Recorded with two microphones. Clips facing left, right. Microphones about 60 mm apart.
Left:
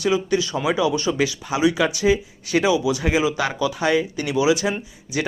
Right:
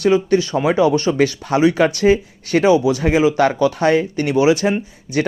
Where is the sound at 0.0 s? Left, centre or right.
Right.